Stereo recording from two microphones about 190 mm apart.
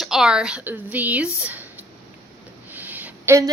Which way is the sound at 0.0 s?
Centre (ahead or behind).